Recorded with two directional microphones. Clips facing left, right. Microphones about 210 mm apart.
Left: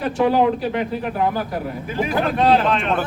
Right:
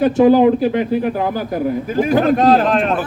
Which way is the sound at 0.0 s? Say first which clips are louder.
Right 7 dB; 25° right (ahead or behind).